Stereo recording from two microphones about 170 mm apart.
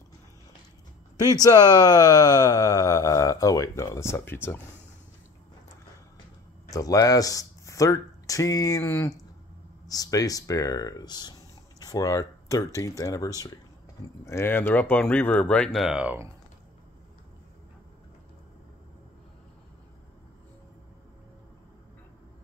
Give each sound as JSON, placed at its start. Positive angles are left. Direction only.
{"t": 1.1, "sound": "speech", "side_deg": 20}
{"t": 6.7, "sound": "speech", "side_deg": 20}